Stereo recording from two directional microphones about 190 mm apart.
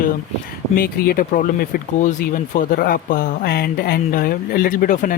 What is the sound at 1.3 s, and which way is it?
Speech, 45° left (ahead or behind).